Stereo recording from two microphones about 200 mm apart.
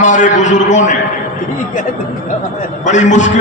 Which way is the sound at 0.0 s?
35° left (ahead or behind).